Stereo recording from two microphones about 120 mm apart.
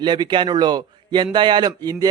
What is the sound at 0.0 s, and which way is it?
A man's voice, 40° right (ahead or behind).